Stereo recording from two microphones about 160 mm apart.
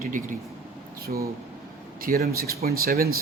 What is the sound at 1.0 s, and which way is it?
Speech, 70° right (ahead or behind).